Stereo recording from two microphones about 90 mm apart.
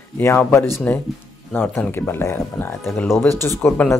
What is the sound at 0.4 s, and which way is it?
A man's voice, 25° left (ahead or behind).